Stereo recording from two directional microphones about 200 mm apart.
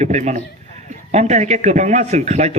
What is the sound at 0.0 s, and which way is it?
A man's voice, 35° right (ahead or behind).